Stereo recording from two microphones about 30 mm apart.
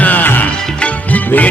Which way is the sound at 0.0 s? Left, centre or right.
Left.